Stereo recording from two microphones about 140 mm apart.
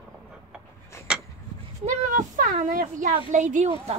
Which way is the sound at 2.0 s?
65° right (ahead or behind).